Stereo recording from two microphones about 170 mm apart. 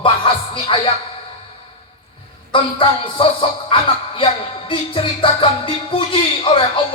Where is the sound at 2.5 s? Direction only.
30° left (ahead or behind).